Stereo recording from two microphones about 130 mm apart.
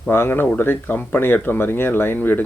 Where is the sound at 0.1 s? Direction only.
15° left (ahead or behind).